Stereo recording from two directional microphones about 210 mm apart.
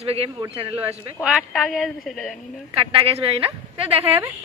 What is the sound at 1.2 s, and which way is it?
A woman's voice, centre (ahead or behind).